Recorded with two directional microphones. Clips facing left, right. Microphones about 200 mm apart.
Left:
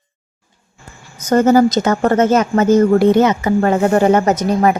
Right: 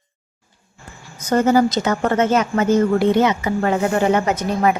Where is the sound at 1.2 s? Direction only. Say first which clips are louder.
Left 4 dB; 45° left (ahead or behind).